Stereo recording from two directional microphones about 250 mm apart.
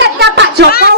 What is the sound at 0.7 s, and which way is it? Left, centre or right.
Speech, left.